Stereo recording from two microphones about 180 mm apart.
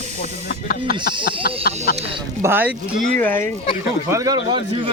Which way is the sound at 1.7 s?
60° left (ahead or behind).